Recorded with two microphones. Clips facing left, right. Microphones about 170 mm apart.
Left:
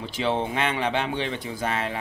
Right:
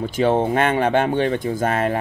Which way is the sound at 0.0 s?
50° right (ahead or behind).